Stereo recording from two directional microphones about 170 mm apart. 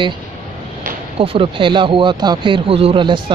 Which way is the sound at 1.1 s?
30° right (ahead or behind).